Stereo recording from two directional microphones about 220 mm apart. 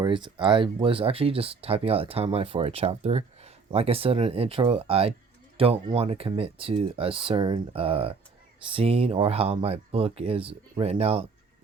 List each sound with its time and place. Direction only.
0.0 s speech: 20° right (ahead or behind)